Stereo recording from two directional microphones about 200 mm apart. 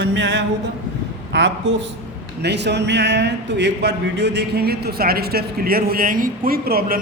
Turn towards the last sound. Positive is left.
turn(degrees=-50)  # may be behind; listen again after turning